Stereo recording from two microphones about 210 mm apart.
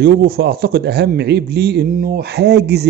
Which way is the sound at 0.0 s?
50° right (ahead or behind).